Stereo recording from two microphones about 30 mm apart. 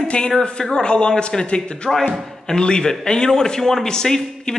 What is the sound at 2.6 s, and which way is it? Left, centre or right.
A man's voice, left.